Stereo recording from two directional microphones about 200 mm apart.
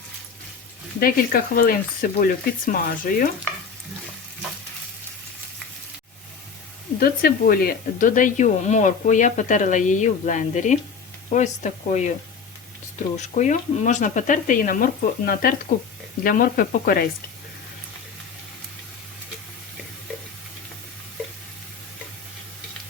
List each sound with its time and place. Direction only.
0.9 s speech: 45° left (ahead or behind)
7.0 s speech: 50° left (ahead or behind)
13.1 s speech: 35° left (ahead or behind)